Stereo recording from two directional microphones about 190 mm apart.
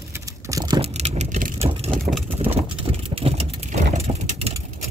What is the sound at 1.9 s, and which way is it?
Vehicle, centre (ahead or behind).